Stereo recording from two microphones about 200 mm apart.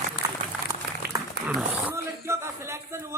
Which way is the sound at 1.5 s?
5° right (ahead or behind).